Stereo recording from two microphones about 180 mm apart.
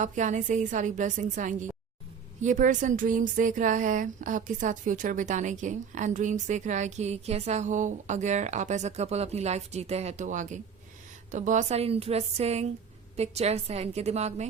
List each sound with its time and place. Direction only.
0.0 s a woman's voice: 45° right (ahead or behind)